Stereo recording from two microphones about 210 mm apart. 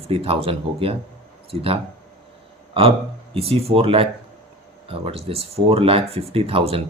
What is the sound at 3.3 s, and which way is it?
Speech, 30° right (ahead or behind).